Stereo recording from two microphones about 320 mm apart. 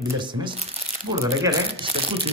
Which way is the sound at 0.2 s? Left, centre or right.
Centre.